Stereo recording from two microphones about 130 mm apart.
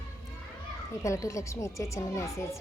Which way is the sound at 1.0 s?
25° left (ahead or behind).